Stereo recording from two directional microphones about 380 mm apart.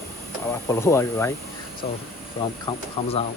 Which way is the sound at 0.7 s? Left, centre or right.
Centre.